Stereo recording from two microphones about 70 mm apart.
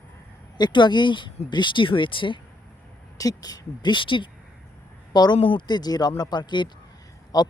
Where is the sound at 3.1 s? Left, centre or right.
Left.